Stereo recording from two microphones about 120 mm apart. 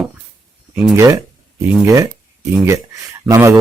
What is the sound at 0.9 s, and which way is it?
Speech, 30° right (ahead or behind).